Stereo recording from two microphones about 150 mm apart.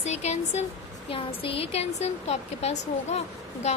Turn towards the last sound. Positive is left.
turn(degrees=45)  # may be behind; listen again after turning